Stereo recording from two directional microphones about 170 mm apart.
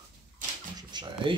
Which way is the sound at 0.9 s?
25° right (ahead or behind).